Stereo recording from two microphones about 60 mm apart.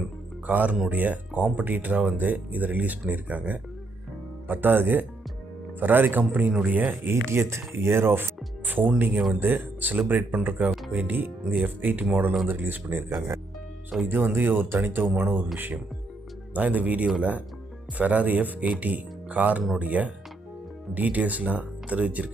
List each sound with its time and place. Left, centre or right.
0.4 s speech: right
7.3 s speech: right